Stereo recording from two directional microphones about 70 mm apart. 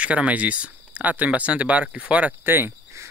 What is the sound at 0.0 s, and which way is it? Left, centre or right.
Speech, centre.